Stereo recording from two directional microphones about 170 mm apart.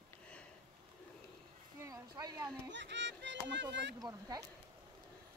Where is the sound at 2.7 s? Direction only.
90° right.